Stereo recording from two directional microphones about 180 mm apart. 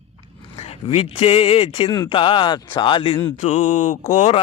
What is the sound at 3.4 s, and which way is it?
Mantra, 40° left (ahead or behind).